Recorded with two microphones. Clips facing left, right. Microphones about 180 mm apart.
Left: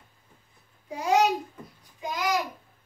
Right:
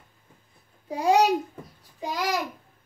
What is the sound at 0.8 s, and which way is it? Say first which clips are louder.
Speech: right 3 dB; 35° right (ahead or behind).